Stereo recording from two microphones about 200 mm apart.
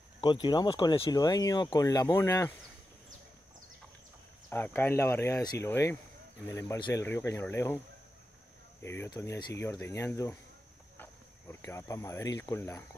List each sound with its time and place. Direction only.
0.2 s speech: 25° left (ahead or behind)
4.5 s speech: 10° left (ahead or behind)
8.8 s speech: 15° left (ahead or behind)